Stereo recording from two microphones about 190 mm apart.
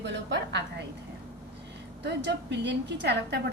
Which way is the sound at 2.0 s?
65° right (ahead or behind).